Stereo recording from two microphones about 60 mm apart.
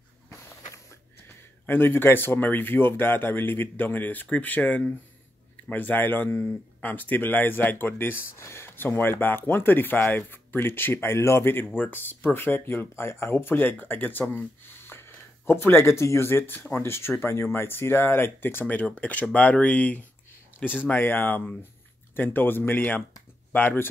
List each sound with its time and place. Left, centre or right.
1.7 s speech: left
18.8 s speech: left